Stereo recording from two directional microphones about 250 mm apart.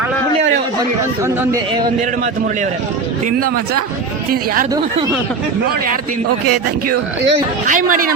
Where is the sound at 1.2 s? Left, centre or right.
Centre.